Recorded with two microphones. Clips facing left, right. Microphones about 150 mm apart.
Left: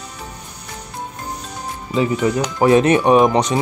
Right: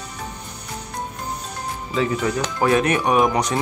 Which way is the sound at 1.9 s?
15° left (ahead or behind).